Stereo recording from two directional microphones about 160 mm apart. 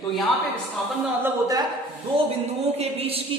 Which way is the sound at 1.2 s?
25° right (ahead or behind).